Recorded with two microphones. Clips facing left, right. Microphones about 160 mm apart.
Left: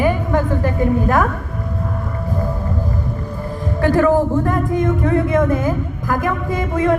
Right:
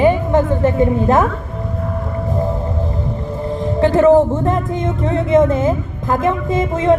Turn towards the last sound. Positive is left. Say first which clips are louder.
# right 3 dB
turn(degrees=-25)  # may be behind; listen again after turning